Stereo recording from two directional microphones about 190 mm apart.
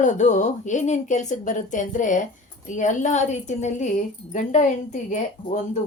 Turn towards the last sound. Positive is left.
turn(degrees=40)  # may be behind; listen again after turning